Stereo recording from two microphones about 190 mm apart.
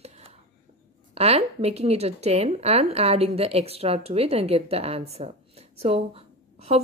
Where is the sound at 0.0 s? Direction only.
35° right (ahead or behind).